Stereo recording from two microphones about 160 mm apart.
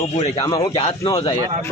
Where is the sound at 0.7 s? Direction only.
35° left (ahead or behind).